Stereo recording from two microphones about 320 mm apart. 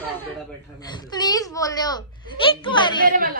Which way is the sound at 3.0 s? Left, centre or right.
Right.